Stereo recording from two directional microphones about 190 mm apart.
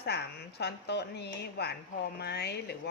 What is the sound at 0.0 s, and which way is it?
A woman's voice, 60° left (ahead or behind).